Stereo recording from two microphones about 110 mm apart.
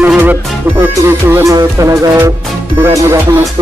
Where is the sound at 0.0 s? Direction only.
15° right (ahead or behind).